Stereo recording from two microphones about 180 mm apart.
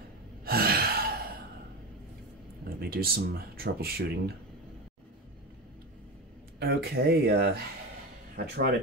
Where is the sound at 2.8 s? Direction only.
55° right (ahead or behind).